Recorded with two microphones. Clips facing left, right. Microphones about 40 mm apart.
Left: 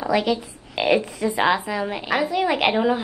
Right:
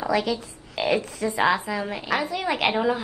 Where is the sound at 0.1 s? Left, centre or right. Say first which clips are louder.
Left 4 dB; centre.